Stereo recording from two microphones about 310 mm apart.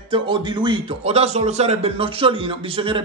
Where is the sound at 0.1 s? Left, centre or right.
Centre.